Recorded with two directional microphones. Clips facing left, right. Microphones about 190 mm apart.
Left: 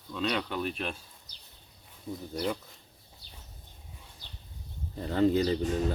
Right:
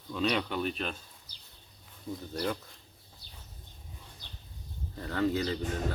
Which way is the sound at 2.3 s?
5° left (ahead or behind).